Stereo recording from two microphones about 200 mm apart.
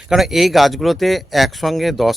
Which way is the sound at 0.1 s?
Centre (ahead or behind).